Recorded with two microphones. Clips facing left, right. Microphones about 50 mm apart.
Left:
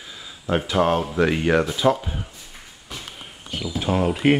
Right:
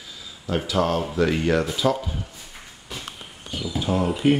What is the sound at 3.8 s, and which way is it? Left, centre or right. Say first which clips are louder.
Speech: left 2 dB; left.